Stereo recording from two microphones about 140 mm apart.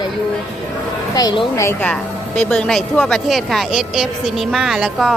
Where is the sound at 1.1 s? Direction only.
30° left (ahead or behind).